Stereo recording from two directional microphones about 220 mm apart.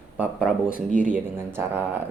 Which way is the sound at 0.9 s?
35° right (ahead or behind).